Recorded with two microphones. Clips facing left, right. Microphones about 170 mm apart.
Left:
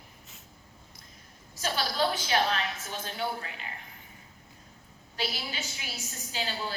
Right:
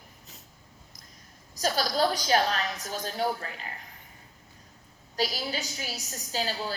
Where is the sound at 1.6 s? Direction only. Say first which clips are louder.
Right 3 dB; 40° right (ahead or behind).